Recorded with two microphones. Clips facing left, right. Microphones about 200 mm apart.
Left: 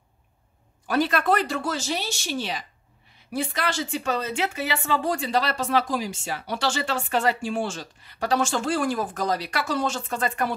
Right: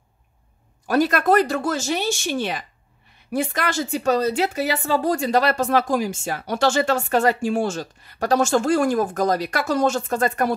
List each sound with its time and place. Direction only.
0.8 s speech: 45° right (ahead or behind)